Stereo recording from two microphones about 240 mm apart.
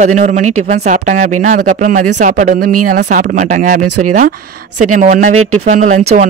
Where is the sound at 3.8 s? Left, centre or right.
Right.